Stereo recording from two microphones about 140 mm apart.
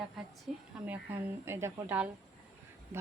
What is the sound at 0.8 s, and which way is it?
Speech, 15° right (ahead or behind).